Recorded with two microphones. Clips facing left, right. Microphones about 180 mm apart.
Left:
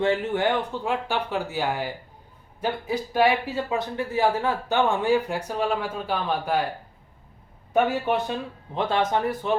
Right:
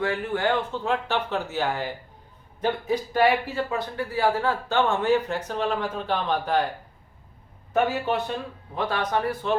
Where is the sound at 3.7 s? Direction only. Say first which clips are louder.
Left 2 dB; 20° left (ahead or behind).